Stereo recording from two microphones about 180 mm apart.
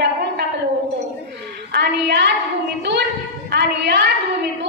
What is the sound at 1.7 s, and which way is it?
Child singing, 70° right (ahead or behind).